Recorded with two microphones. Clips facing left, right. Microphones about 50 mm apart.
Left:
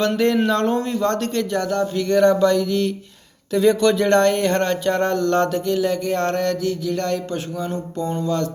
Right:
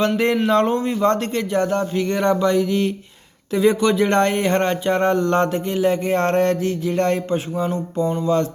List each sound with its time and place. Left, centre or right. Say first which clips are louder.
0.4 s speech: right 2 dB; centre; by 7.2 s right
8.0 s speech: right 2 dB; centre